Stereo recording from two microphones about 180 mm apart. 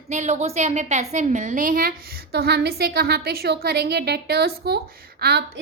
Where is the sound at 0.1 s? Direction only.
40° right (ahead or behind).